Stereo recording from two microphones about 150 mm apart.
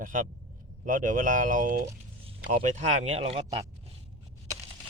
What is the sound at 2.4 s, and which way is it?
Speech, 50° right (ahead or behind).